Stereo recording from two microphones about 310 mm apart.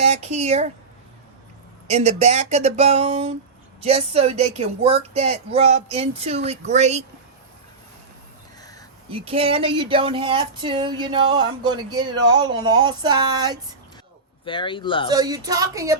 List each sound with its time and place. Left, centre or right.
0.0 s speech: right
1.9 s speech: right
9.0 s speech: centre
14.4 s speech: centre
15.1 s speech: centre